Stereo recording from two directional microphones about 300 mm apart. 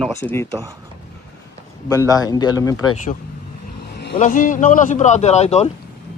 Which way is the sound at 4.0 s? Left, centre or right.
Left.